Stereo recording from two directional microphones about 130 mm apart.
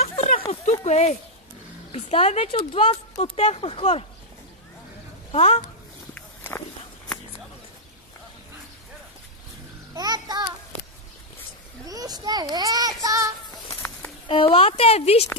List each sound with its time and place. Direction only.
0.0 s a sound: 50° left (ahead or behind)
0.4 s speech: 60° left (ahead or behind)
5.3 s speech: 55° left (ahead or behind)
6.1 s walk: 15° left (ahead or behind)
9.9 s a child's voice: 30° right (ahead or behind)
11.9 s a child's voice: 30° right (ahead or behind)
13.0 s child singing: 25° right (ahead or behind)
13.7 s a sound: 15° left (ahead or behind)
14.2 s speech: 45° left (ahead or behind)